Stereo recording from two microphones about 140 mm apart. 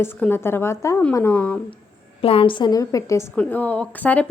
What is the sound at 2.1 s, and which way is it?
A woman's voice, 40° left (ahead or behind).